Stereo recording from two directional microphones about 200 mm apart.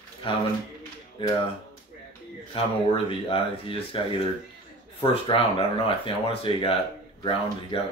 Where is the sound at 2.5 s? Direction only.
25° left (ahead or behind).